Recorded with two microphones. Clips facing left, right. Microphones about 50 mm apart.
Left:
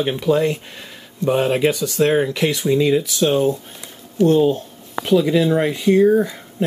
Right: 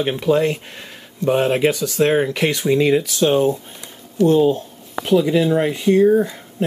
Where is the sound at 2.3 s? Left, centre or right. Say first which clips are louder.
Even; right.